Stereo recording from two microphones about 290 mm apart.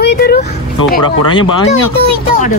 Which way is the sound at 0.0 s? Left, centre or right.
Left.